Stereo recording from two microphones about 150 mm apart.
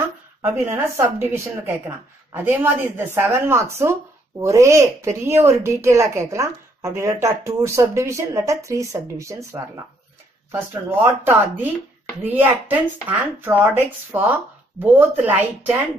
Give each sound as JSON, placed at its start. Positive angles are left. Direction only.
{"t": 0.7, "sound": "speech", "side_deg": -15}